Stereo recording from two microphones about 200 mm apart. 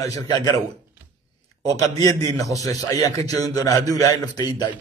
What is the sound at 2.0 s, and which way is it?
A man's voice, 20° left (ahead or behind).